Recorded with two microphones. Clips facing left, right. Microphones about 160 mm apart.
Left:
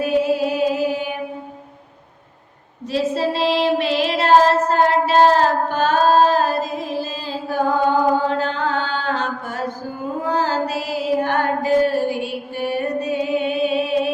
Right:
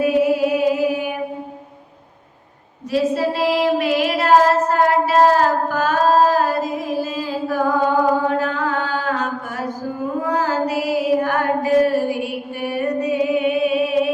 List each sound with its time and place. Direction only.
0.0 s music: 25° left (ahead or behind)
2.9 s child singing: 25° left (ahead or behind)
10.2 s mantra: 25° left (ahead or behind)